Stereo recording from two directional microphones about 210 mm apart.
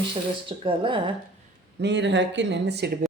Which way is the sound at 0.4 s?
25° right (ahead or behind).